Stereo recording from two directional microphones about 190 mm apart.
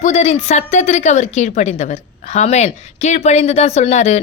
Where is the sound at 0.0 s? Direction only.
35° left (ahead or behind).